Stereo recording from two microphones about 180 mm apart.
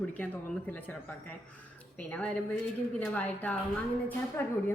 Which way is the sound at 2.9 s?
10° left (ahead or behind).